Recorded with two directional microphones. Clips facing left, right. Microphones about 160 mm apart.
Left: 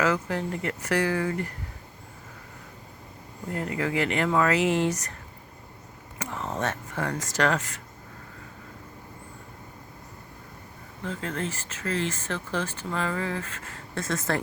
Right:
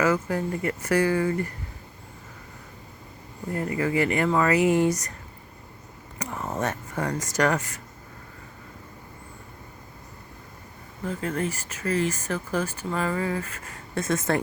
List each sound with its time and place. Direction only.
0.0 s speech: 10° right (ahead or behind)
3.8 s speech: 5° right (ahead or behind)
6.1 s speech: 10° right (ahead or behind)
11.0 s speech: 10° right (ahead or behind)
14.0 s speech: 20° right (ahead or behind)